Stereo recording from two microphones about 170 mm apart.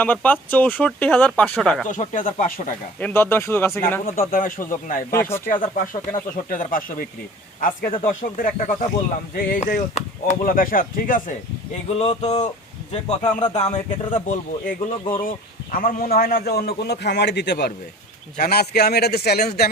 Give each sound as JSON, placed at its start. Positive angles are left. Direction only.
{"t": 0.0, "sound": "speech", "side_deg": 10}
{"t": 1.9, "sound": "speech", "side_deg": 50}
{"t": 3.0, "sound": "speech", "side_deg": 15}
{"t": 4.2, "sound": "speech", "side_deg": 55}
{"t": 5.1, "sound": "speech", "side_deg": 15}
{"t": 5.7, "sound": "speech", "side_deg": 55}
{"t": 11.9, "sound": "a man's voice", "side_deg": 40}
{"t": 13.5, "sound": "a man's voice", "side_deg": 45}
{"t": 18.3, "sound": "a man's voice", "side_deg": 65}